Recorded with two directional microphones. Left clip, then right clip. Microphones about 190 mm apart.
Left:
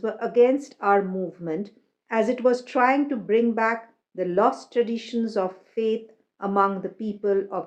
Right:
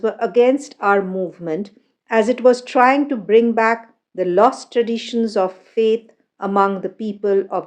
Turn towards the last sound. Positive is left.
turn(degrees=-45)  # may be behind; listen again after turning